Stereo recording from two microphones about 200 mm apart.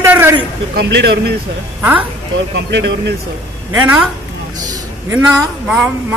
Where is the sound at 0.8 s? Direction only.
55° right (ahead or behind).